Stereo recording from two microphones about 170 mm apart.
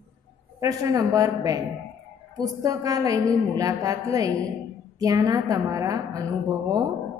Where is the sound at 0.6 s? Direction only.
20° right (ahead or behind).